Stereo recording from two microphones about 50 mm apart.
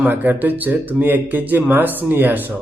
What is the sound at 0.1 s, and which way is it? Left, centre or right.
Speech, right.